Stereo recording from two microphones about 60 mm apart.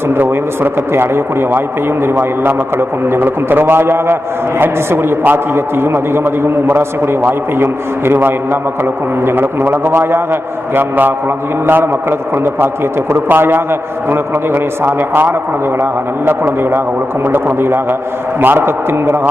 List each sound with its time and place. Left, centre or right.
0.1 s a man's voice: right
13.2 s a man's voice: right